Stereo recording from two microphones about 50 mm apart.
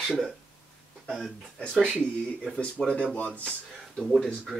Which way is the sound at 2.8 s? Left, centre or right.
Centre.